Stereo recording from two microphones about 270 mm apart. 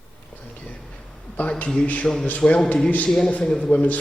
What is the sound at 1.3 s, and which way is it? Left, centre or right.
A man's voice, centre.